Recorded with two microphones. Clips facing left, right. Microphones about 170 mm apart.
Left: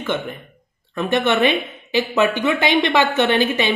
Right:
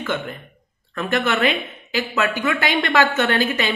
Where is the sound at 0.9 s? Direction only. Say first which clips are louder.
Left 3 dB; 20° left (ahead or behind).